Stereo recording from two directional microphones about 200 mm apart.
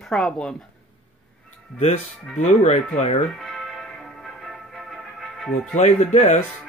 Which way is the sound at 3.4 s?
Centre (ahead or behind).